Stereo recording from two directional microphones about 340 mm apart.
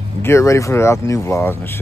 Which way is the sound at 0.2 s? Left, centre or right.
Centre.